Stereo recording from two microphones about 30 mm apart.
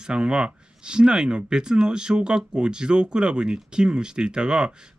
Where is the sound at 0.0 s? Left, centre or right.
Right.